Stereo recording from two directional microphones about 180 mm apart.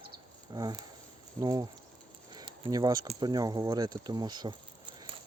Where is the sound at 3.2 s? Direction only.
20° right (ahead or behind).